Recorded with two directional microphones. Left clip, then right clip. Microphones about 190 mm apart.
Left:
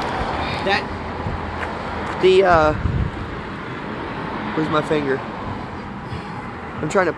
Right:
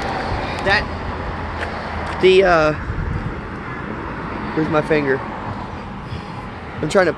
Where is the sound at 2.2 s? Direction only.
40° right (ahead or behind).